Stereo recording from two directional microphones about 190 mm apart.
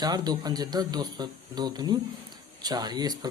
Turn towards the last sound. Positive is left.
turn(degrees=-20)  # may be behind; listen again after turning